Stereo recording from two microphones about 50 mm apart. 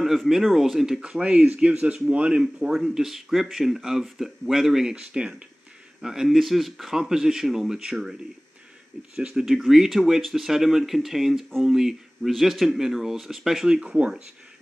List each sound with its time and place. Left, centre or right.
0.3 s speech: centre
1.2 s speech: right
2.7 s speech: centre
4.8 s speech: centre
6.2 s speech: centre
13.7 s speech: right